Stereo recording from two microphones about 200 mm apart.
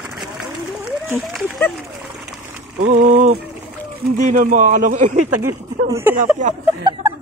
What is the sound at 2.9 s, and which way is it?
A man's voice, 35° right (ahead or behind).